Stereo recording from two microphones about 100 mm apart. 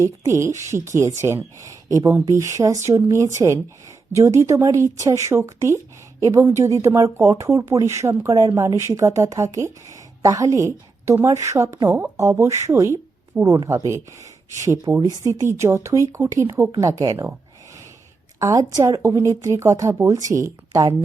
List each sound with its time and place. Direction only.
0.0 s speech: 30° right (ahead or behind)
16.7 s speech: 40° right (ahead or behind)
18.3 s speech: 30° right (ahead or behind)